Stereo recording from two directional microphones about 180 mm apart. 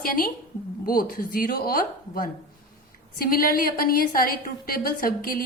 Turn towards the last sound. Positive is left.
turn(degrees=50)  # may be behind; listen again after turning